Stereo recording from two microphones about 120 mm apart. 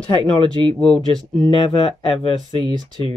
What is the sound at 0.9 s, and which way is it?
Speech, 5° left (ahead or behind).